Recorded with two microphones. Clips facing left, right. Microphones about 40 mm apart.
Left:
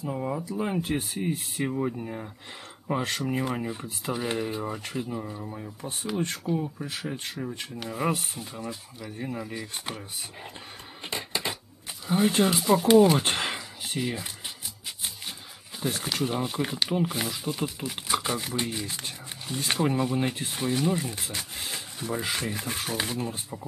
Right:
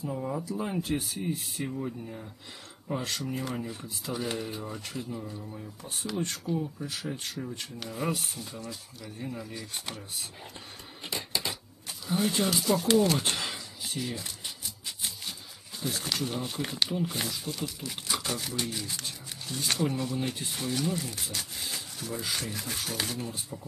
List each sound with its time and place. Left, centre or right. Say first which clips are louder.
0.0 s speech: left 2 dB; left
5.8 s speech: left 3 dB; left
7.8 s speech: left 5 dB; centre
8.1 s speech: left 3 dB; left
11.1 s a sound: left 2 dB; left
12.1 s speech: left 5 dB; left
13.2 s a sound: left 4 dB; left
15.0 s music: left 1 dB; left
15.8 s speech: left 4 dB; left
16.4 s speech: left 3 dB; centre